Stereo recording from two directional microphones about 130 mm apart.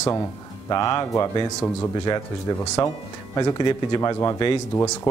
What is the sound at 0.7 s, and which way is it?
Speech, 30° left (ahead or behind).